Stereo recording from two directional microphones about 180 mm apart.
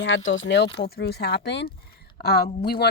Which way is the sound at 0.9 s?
65° left (ahead or behind).